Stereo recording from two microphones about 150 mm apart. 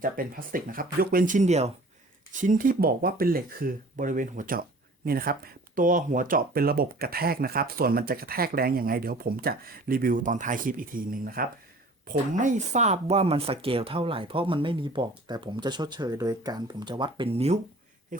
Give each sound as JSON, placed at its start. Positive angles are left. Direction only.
{"t": 0.0, "sound": "speech", "side_deg": -70}
{"t": 2.3, "sound": "speech", "side_deg": -60}
{"t": 5.0, "sound": "speech", "side_deg": -80}
{"t": 12.0, "sound": "speech", "side_deg": -55}
{"t": 18.1, "sound": "speech", "side_deg": -60}